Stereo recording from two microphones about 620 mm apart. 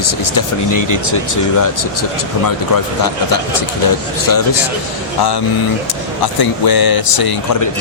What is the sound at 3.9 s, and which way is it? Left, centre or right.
Speech, left.